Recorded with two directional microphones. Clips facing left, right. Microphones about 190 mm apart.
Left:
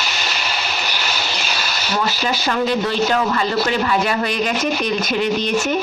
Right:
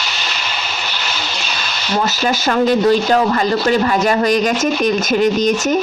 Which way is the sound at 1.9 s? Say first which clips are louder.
Right 4 dB; 45° right (ahead or behind).